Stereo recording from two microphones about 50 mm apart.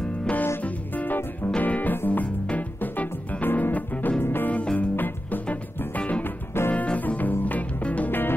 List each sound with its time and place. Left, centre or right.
0.6 s music: left
4.2 s music: left
6.2 s music: left
6.7 s music: left
8.1 s music: left